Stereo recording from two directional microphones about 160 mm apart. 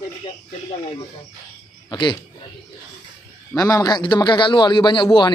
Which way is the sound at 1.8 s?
30° left (ahead or behind).